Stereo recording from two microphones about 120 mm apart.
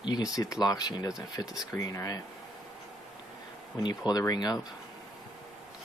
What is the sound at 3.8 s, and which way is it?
Speech, 35° left (ahead or behind).